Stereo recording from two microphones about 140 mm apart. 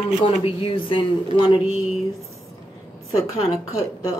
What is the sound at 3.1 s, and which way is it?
Speech, 25° left (ahead or behind).